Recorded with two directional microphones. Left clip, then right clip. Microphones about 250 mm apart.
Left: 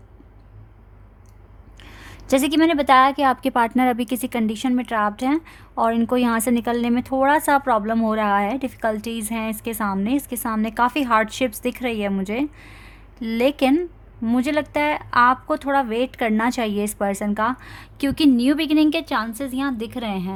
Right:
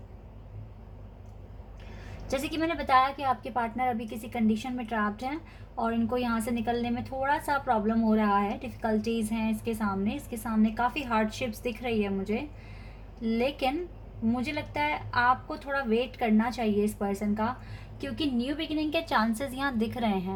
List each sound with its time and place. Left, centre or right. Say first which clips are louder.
2.3 s a woman's voice: left 12 dB; left
19.2 s a woman's voice: left 4 dB; left
19.8 s a woman's voice: left 2 dB; left